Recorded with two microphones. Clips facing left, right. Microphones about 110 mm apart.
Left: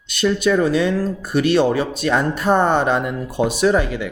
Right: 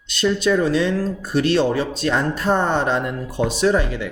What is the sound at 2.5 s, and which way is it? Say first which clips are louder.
Speech: left 4 dB; 55° left (ahead or behind).